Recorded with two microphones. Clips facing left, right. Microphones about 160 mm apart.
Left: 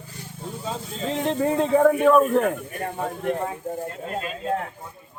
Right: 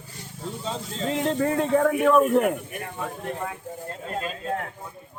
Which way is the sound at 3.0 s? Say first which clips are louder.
Left 5 dB; 25° left (ahead or behind).